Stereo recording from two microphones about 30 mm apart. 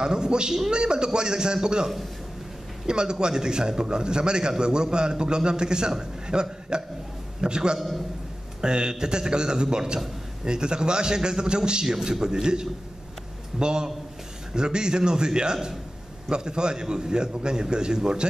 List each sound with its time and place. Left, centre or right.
0.0 s a man's voice: right
2.9 s a man's voice: right